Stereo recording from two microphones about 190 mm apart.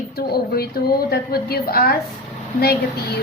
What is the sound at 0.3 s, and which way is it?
Speech, 55° left (ahead or behind).